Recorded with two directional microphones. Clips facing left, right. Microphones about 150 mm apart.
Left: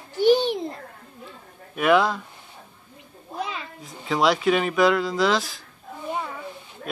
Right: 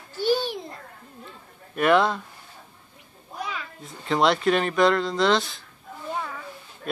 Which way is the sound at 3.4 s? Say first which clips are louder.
Left 2 dB; 25° left (ahead or behind).